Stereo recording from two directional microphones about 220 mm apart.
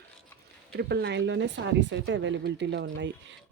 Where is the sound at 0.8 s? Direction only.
50° right (ahead or behind).